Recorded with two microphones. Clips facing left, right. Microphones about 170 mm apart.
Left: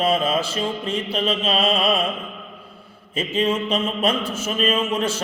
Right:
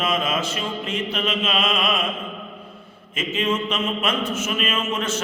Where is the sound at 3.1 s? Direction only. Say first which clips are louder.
Left 2 dB; 35° left (ahead or behind).